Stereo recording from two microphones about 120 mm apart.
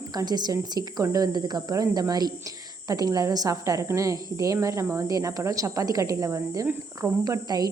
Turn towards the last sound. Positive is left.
turn(degrees=-30)  # may be behind; listen again after turning